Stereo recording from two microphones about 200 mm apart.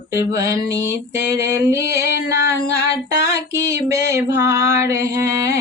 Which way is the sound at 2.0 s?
55° left (ahead or behind).